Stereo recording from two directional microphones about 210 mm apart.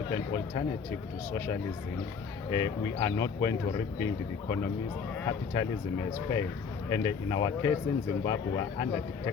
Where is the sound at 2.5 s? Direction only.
15° left (ahead or behind).